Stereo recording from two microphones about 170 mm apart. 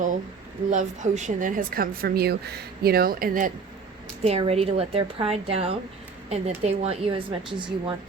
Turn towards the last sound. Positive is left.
turn(degrees=-30)  # may be behind; listen again after turning